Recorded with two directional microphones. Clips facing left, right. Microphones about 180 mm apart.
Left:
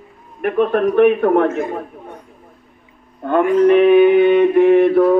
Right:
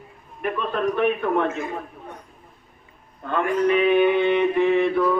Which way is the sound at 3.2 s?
55° left (ahead or behind).